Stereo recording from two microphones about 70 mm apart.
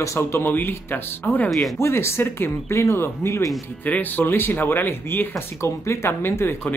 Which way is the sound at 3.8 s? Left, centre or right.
Left.